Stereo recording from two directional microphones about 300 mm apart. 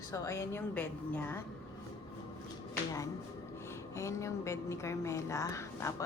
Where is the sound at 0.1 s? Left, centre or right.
Centre.